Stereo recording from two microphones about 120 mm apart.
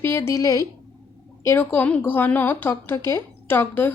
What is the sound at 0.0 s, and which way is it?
Speech, 20° left (ahead or behind).